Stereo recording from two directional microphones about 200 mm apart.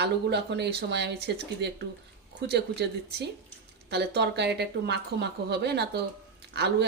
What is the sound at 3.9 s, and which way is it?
Speech, 55° right (ahead or behind).